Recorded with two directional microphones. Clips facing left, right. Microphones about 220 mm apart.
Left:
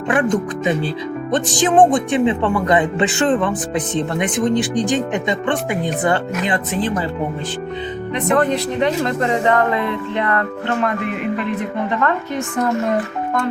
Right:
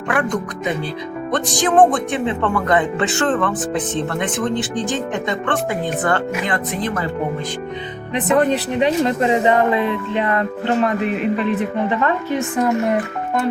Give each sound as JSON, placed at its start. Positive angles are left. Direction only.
{"t": 0.1, "sound": "speech", "side_deg": 20}
{"t": 8.1, "sound": "speech", "side_deg": -15}